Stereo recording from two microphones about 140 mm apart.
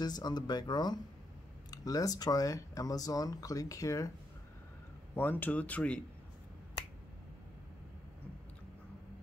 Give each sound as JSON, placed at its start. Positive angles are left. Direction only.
{"t": 0.0, "sound": "speech", "side_deg": 30}
{"t": 5.1, "sound": "speech", "side_deg": 15}